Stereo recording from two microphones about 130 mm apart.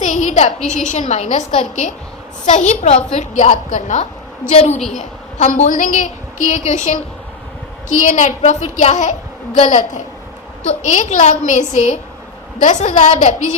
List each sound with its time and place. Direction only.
0.0 s a sound: 65° left (ahead or behind)
0.7 s a woman's voice: 70° left (ahead or behind)
4.5 s a woman's voice: 55° left (ahead or behind)
4.9 s a woman's voice: 65° left (ahead or behind); by 6.1 s 80° left
6.7 s a woman's voice: 70° left (ahead or behind)